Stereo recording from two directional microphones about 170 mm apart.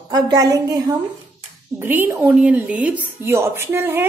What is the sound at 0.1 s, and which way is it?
A woman's voice, 25° right (ahead or behind).